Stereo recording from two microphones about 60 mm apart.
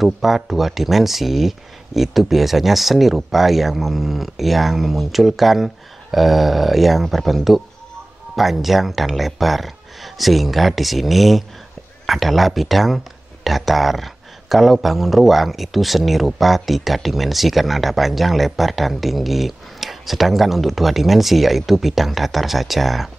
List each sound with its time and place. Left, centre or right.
0.0 s speech: centre